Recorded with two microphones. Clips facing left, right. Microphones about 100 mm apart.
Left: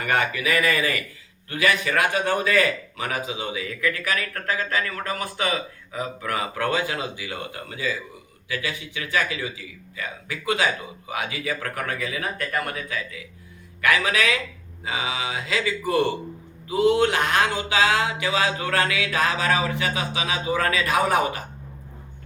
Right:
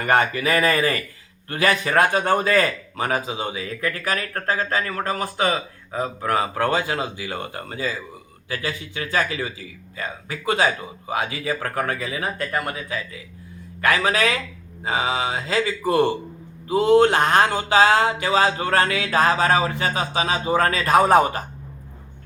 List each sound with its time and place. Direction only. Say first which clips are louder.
0.0 s a man's voice: right 4 dB; 40° right (ahead or behind)